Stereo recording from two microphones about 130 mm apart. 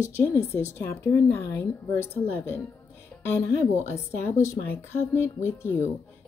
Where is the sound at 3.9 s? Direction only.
20° left (ahead or behind).